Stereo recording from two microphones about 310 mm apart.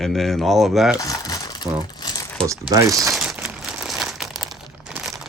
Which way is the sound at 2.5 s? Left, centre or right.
Centre.